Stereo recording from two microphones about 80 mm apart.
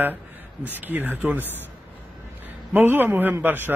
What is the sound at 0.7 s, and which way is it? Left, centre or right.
Speech, right.